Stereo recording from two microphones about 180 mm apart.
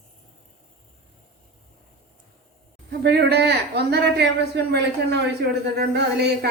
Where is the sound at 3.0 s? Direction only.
65° right (ahead or behind).